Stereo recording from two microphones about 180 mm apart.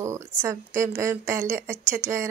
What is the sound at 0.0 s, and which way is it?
Speech, 15° right (ahead or behind).